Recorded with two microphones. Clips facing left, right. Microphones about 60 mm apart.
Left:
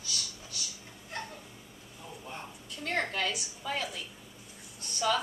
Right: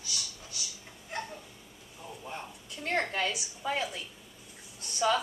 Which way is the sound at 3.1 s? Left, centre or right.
Centre.